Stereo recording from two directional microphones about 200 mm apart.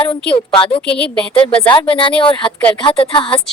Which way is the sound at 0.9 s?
5° left (ahead or behind).